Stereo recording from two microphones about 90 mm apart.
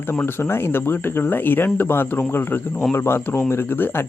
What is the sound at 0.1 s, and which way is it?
Speech, 25° left (ahead or behind).